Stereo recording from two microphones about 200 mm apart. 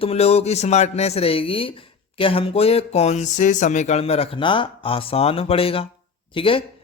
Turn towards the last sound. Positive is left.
turn(degrees=25)  # may be behind; listen again after turning